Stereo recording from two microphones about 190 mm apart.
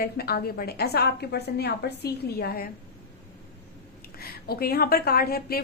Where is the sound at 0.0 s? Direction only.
55° left (ahead or behind).